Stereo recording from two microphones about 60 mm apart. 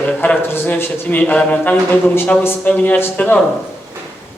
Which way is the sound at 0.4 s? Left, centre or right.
Left.